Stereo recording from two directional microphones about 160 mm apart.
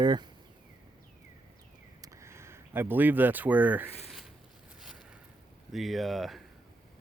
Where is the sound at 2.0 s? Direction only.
20° right (ahead or behind); by 5.1 s 5° right (ahead or behind).